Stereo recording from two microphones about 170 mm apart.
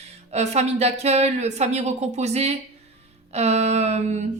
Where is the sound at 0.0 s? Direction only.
40° right (ahead or behind).